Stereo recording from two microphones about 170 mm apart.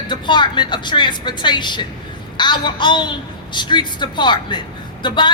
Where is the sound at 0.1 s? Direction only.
25° left (ahead or behind).